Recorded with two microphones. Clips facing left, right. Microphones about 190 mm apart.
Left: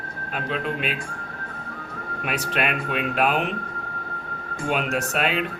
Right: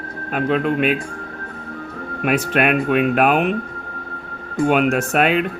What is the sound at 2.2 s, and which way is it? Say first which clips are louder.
A man's voice: right 8 dB; 55° right (ahead or behind).